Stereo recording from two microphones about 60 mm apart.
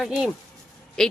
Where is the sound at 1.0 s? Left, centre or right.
Centre.